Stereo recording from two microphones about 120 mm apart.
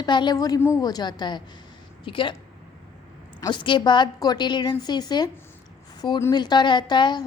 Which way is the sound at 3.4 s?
40° left (ahead or behind).